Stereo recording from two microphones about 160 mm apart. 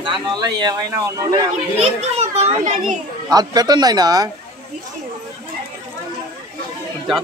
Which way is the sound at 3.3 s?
25° right (ahead or behind).